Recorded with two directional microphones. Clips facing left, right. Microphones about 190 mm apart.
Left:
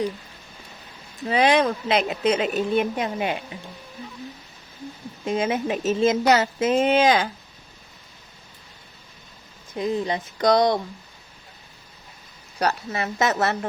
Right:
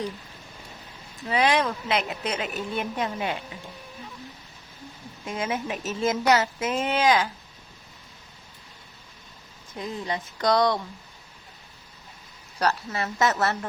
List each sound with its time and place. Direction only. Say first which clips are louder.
1.3 s speech: left 4 dB; 25° left (ahead or behind)
5.2 s speech: left 6 dB; 25° left (ahead or behind)
9.7 s speech: left 6 dB; 20° left (ahead or behind)
12.5 s speech: left 2 dB; 15° left (ahead or behind)